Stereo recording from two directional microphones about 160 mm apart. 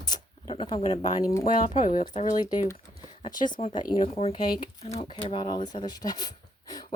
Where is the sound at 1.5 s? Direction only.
55° left (ahead or behind).